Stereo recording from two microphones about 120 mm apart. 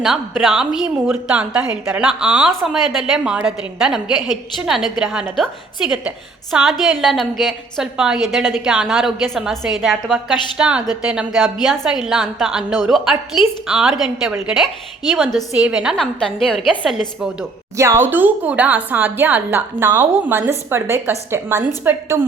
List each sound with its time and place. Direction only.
0.0 s a woman's voice: centre (ahead or behind)
16.0 s a woman's voice: 5° left (ahead or behind)
17.7 s speech: 20° right (ahead or behind)